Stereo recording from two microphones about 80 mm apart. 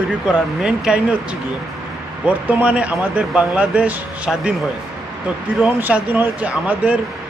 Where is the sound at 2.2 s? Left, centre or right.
Centre.